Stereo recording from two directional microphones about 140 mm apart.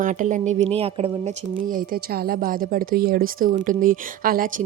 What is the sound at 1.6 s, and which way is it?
A woman's voice, 85° right.